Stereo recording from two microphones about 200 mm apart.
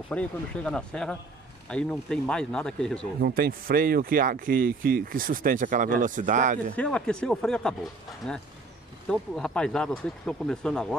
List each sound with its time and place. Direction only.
0.1 s speech: 5° left (ahead or behind)
3.2 s speech: 50° right (ahead or behind)
6.7 s speech: 5° left (ahead or behind)